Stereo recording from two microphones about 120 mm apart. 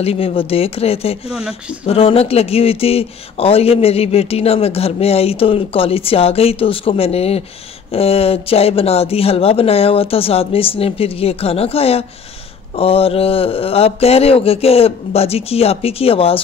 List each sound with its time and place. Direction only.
0.0 s speech: 55° left (ahead or behind)